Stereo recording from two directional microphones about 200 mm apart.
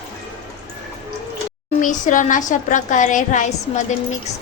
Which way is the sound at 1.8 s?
40° left (ahead or behind).